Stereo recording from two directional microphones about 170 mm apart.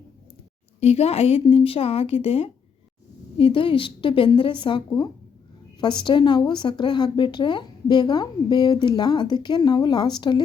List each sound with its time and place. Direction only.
0.8 s a woman's voice: 35° left (ahead or behind)